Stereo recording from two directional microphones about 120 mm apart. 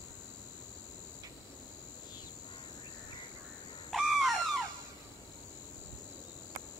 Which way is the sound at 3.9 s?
Centre (ahead or behind).